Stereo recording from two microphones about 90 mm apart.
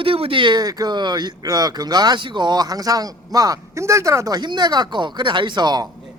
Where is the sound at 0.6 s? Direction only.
45° right (ahead or behind).